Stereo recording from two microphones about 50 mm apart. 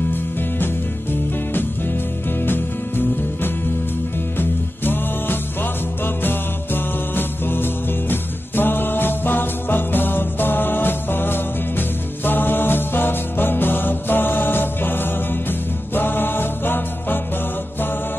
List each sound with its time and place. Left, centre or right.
2.4 s music: left